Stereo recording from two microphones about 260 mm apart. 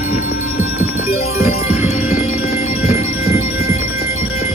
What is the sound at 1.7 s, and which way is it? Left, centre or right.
Music, left.